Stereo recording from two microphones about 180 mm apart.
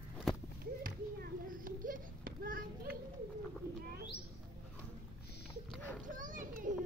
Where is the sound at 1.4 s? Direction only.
50° right (ahead or behind).